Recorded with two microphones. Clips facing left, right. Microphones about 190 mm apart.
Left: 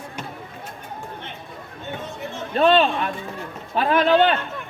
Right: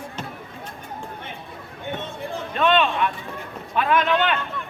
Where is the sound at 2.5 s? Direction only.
35° left (ahead or behind).